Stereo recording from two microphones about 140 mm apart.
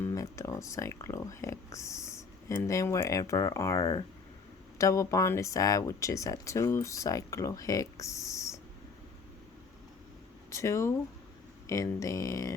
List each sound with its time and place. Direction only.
0.0 s speech: 25° left (ahead or behind)
10.5 s speech: 20° left (ahead or behind)